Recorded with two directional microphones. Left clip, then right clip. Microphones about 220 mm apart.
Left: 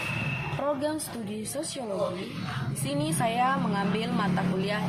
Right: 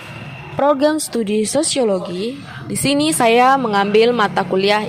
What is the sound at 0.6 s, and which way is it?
A woman's voice, 45° right (ahead or behind).